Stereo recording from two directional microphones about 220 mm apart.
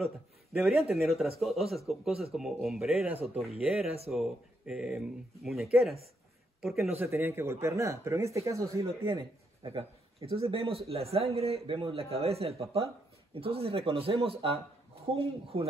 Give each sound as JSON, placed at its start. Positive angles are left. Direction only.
{"t": 0.0, "sound": "a man's voice", "side_deg": 0}
{"t": 7.1, "sound": "a man's voice", "side_deg": -10}
{"t": 9.8, "sound": "a man's voice", "side_deg": -25}